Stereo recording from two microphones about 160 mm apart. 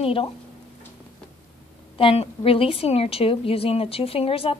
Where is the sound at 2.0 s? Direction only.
35° left (ahead or behind).